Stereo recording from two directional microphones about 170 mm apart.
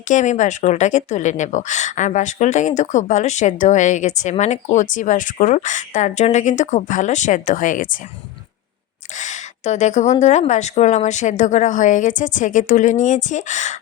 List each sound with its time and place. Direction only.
0.1 s a woman's voice: 45° left (ahead or behind)
9.1 s a woman's voice: 45° left (ahead or behind)